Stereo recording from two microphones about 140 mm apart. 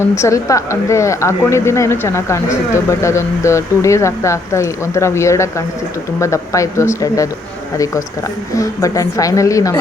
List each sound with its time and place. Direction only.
0.2 s speech: 20° left (ahead or behind)
8.5 s speech: 25° left (ahead or behind)